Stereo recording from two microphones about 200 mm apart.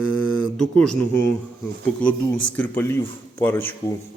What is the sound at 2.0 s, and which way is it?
Speech, 5° left (ahead or behind).